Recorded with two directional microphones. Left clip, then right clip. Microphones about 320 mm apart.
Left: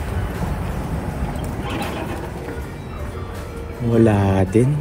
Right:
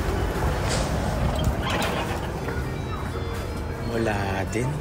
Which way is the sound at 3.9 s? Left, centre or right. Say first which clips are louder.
Left 9 dB; centre.